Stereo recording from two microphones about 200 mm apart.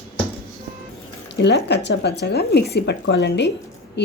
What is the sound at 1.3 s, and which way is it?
Speech, 60° left (ahead or behind).